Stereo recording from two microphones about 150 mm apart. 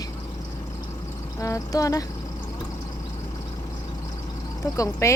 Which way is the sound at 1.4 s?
20° left (ahead or behind).